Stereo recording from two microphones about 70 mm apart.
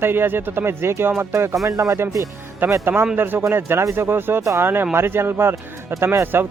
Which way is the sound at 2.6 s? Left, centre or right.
Right.